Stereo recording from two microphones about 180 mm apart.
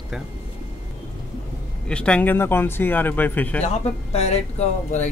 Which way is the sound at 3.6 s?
35° left (ahead or behind).